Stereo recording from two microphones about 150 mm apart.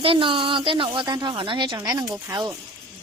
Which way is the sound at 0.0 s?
35° right (ahead or behind).